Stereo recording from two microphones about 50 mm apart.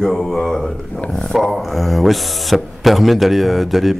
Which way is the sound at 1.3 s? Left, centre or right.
Centre.